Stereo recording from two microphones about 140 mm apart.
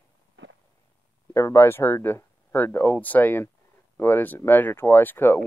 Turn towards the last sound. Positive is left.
turn(degrees=15)  # may be behind; listen again after turning